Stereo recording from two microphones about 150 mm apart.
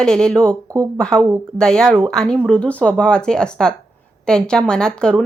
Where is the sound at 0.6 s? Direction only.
25° right (ahead or behind).